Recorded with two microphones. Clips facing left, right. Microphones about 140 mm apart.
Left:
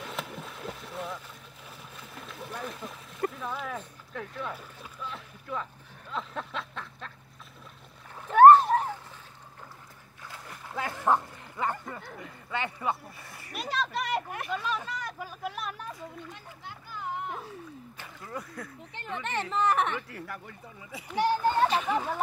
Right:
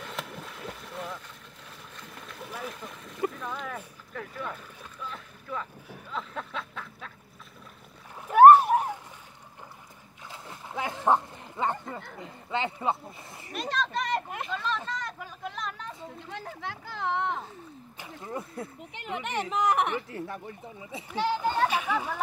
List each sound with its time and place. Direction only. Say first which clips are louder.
0.0 s boat: left 1 dB; centre (ahead or behind)
4.1 s speech: even; centre (ahead or behind)
5.0 s boat: even; centre (ahead or behind)
6.1 s a sound: even; centre (ahead or behind)
8.3 s boat: right 1 dB; 10° right (ahead or behind)
10.2 s splash: right 1 dB; 20° right (ahead or behind)
12.2 s speech: right 3 dB; 25° right (ahead or behind)
13.5 s speech: right 1 dB; 5° left (ahead or behind)
14.5 s a sound: even; 10° left (ahead or behind)
16.3 s a sound: right 7 dB; 90° right
17.9 s a sound: right 4 dB; 20° right (ahead or behind)
18.9 s speech: right 1 dB; 15° right (ahead or behind)